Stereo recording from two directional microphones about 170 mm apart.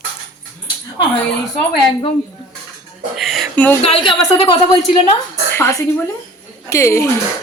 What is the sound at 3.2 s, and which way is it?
Speech, centre (ahead or behind).